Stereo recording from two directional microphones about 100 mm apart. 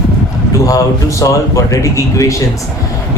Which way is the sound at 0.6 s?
35° left (ahead or behind).